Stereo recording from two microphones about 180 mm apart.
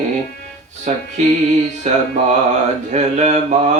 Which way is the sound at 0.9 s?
40° right (ahead or behind).